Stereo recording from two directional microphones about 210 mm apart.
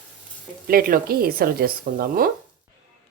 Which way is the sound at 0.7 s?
45° right (ahead or behind).